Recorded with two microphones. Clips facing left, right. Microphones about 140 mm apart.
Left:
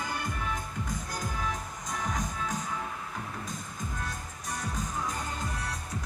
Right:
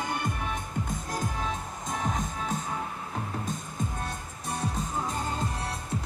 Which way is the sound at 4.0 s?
25° right (ahead or behind).